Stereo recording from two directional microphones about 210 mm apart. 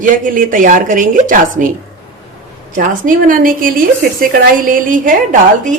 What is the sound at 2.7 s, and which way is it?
Speech, 40° right (ahead or behind).